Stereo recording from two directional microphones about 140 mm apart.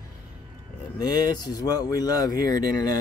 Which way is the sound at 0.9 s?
30° left (ahead or behind).